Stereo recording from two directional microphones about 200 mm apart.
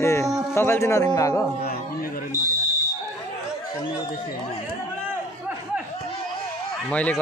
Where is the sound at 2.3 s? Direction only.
15° left (ahead or behind).